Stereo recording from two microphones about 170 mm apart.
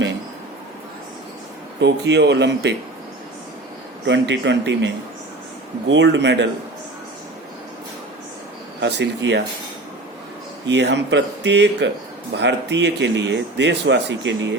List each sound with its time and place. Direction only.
1.8 s speech: 90° right
4.0 s speech: 90° right
5.9 s speech: 90° right
8.8 s speech: 90° right
10.7 s speech: 90° right